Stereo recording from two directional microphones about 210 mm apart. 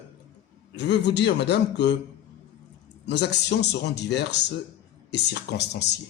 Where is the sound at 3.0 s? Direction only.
55° left (ahead or behind).